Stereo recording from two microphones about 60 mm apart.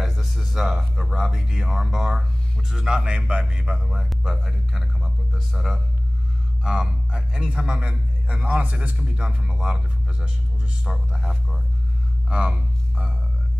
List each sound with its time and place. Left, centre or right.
0.0 s a sound: centre
2.7 s a man's voice: centre
11.1 s a man's voice: centre